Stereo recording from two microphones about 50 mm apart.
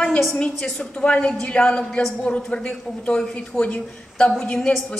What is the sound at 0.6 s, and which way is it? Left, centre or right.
Speech, centre.